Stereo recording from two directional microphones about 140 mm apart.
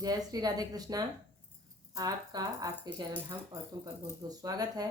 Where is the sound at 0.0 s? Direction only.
25° right (ahead or behind).